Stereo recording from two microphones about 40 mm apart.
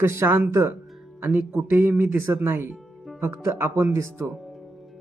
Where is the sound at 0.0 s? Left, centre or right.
Right.